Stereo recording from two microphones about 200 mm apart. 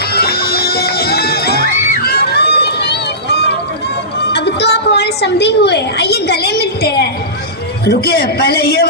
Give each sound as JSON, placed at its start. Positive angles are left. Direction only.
{"t": 0.1, "sound": "music", "side_deg": 50}
{"t": 2.0, "sound": "run", "side_deg": 50}
{"t": 4.3, "sound": "a woman's voice", "side_deg": 55}